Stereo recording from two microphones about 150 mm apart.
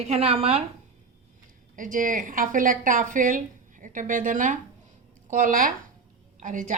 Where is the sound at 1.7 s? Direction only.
60° right (ahead or behind).